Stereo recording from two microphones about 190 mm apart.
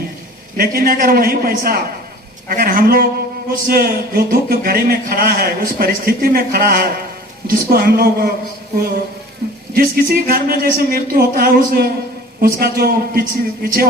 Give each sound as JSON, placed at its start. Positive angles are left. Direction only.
{"t": 0.5, "sound": "speech", "side_deg": -50}
{"t": 9.4, "sound": "sheep", "side_deg": -55}
{"t": 9.7, "sound": "speech", "side_deg": -50}